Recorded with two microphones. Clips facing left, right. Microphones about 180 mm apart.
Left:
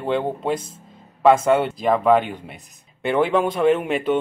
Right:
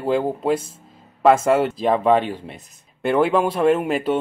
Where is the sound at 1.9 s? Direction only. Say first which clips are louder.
Left 1 dB; 30° right (ahead or behind).